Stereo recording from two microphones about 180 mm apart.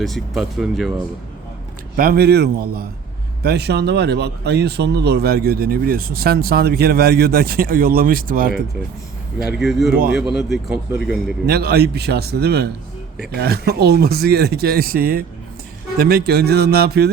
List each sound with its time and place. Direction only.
0.0 s speech: centre (ahead or behind)
2.0 s speech: 60° right (ahead or behind)
9.4 s speech: 5° right (ahead or behind)
11.4 s speech: 60° right (ahead or behind)